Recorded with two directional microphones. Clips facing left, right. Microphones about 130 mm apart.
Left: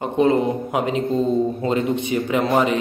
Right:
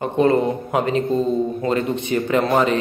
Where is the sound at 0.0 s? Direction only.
15° left (ahead or behind).